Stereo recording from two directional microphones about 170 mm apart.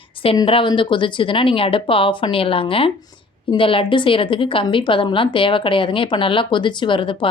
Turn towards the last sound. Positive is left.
turn(degrees=30)  # may be behind; listen again after turning